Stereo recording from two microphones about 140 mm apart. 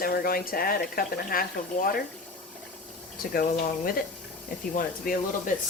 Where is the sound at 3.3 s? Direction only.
90° left.